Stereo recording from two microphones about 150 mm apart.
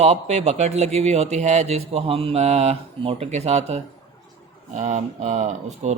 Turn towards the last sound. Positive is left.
turn(degrees=-50)  # may be behind; listen again after turning